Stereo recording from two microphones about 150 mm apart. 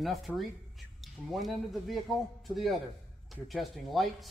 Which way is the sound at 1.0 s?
Centre (ahead or behind).